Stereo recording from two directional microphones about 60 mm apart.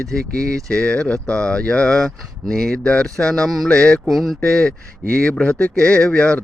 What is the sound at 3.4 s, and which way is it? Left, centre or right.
Speech, centre.